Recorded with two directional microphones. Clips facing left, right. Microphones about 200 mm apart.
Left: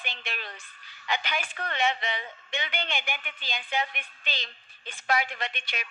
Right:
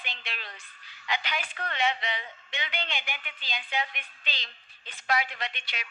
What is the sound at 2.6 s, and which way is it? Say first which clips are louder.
A woman's voice: left 1 dB; 50° left (ahead or behind).